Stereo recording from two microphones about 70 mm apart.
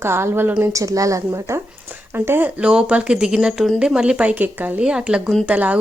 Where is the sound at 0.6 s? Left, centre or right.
Right.